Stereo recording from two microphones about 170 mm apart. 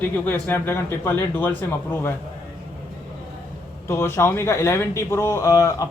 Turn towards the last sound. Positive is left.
turn(degrees=20)  # may be behind; listen again after turning